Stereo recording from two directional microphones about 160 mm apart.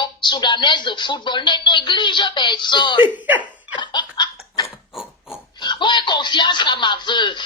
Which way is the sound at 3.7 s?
30° left (ahead or behind).